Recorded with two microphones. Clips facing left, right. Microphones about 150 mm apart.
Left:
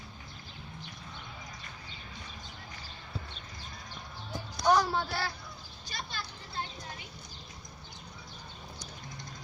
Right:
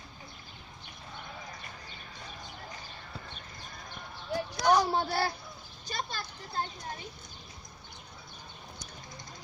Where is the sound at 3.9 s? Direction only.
70° right (ahead or behind).